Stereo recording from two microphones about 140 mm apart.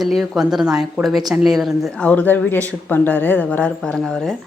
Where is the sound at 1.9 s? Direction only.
10° left (ahead or behind).